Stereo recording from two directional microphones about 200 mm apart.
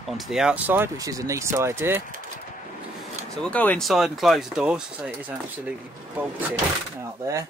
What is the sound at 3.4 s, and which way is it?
Speech, 5° left (ahead or behind).